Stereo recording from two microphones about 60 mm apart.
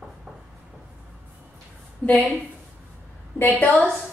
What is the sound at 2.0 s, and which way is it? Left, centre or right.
Speech, centre.